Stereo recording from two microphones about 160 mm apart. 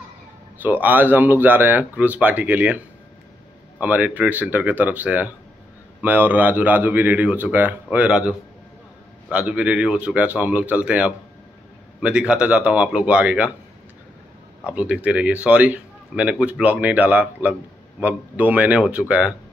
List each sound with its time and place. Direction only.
0.6 s a man's voice: 10° right (ahead or behind)
3.8 s a man's voice: 10° right (ahead or behind)
14.7 s a man's voice: 10° right (ahead or behind)